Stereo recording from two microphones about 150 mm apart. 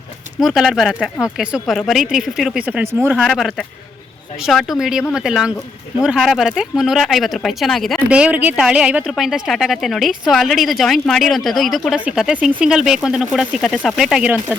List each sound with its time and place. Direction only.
0.3 s speech: centre (ahead or behind)
3.2 s speech: centre (ahead or behind)